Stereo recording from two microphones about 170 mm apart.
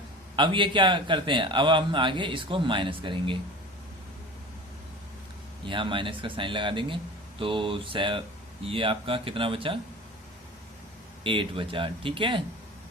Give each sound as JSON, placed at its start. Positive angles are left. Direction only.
{"t": 0.3, "sound": "a man's voice", "side_deg": -30}
{"t": 5.6, "sound": "a man's voice", "side_deg": -30}
{"t": 11.2, "sound": "a man's voice", "side_deg": -30}